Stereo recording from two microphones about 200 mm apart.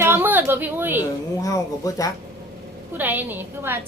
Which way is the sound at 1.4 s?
15° left (ahead or behind).